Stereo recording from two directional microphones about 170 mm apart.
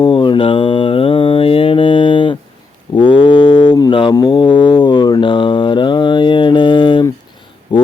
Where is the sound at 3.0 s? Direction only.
30° left (ahead or behind).